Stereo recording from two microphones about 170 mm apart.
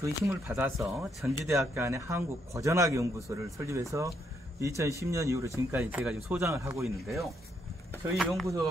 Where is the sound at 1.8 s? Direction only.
15° right (ahead or behind).